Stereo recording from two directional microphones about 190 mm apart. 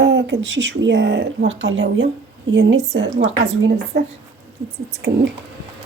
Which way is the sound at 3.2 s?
65° right (ahead or behind).